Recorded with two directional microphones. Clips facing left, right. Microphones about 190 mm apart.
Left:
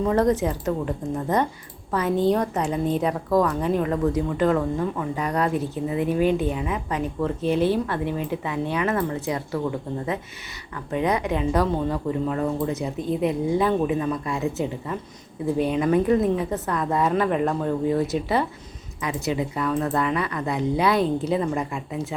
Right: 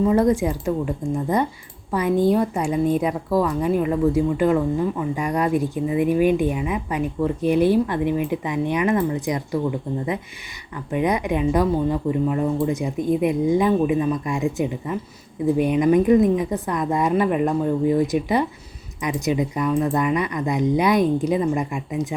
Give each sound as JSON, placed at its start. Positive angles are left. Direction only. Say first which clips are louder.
{"t": 0.0, "sound": "a woman's voice", "louder": "right 3 dB", "side_deg": -10}